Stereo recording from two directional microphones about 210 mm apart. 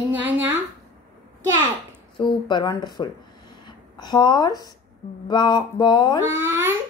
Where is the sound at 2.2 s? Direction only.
20° left (ahead or behind).